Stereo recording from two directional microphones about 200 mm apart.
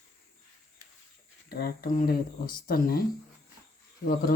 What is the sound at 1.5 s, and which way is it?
Speech, 50° left (ahead or behind).